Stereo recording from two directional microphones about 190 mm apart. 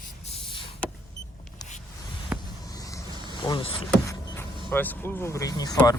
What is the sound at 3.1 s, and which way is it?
Vehicle, 25° right (ahead or behind).